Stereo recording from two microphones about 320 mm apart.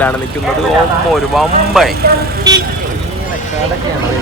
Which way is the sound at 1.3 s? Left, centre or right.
Centre.